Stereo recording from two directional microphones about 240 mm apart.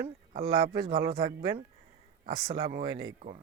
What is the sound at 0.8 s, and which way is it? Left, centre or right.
Speech, right.